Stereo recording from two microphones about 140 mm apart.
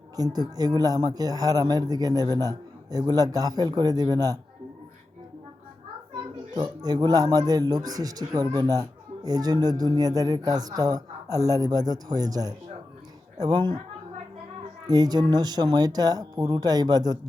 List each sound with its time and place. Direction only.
0.2 s a man's voice: 25° right (ahead or behind)
6.5 s a man's voice: 30° right (ahead or behind)
14.8 s a man's voice: 30° right (ahead or behind)